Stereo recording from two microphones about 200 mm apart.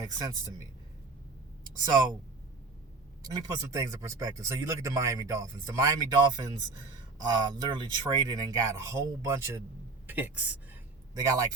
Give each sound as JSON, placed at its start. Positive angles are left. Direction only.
{"t": 0.1, "sound": "a man's voice", "side_deg": -20}
{"t": 3.2, "sound": "a man's voice", "side_deg": -20}